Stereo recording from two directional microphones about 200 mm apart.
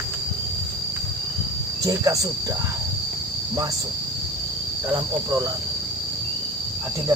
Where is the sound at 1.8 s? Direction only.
15° right (ahead or behind).